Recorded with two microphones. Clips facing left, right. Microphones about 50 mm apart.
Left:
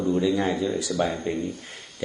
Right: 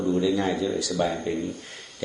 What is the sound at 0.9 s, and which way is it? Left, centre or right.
Speech, left.